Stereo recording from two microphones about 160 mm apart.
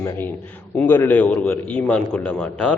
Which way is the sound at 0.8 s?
10° left (ahead or behind).